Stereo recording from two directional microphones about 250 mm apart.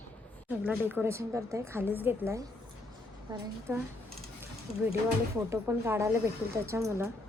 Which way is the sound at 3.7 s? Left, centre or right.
Centre.